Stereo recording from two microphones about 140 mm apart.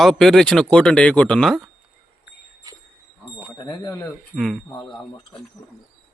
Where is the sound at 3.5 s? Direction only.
30° left (ahead or behind).